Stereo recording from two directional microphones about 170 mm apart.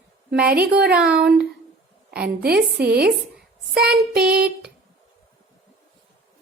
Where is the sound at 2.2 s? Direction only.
70° right (ahead or behind).